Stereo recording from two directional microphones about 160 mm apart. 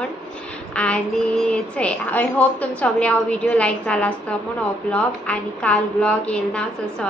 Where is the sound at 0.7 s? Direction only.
5° left (ahead or behind).